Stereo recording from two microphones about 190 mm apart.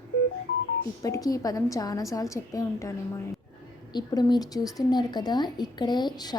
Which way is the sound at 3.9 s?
20° left (ahead or behind).